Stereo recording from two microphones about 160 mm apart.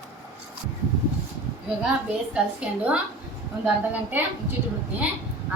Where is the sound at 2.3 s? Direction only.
5° right (ahead or behind).